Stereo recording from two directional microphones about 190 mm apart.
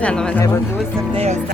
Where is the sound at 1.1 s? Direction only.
35° right (ahead or behind).